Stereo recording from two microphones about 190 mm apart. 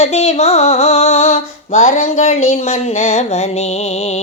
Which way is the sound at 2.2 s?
35° left (ahead or behind).